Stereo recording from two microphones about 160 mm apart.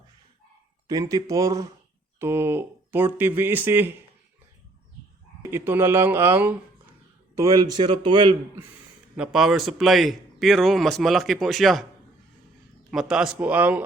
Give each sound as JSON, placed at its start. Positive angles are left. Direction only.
{"t": 0.9, "sound": "a man's voice", "side_deg": -25}
{"t": 5.4, "sound": "speech", "side_deg": -15}
{"t": 7.3, "sound": "a man's voice", "side_deg": -20}
{"t": 9.1, "sound": "a man's voice", "side_deg": -5}
{"t": 12.9, "sound": "speech", "side_deg": -5}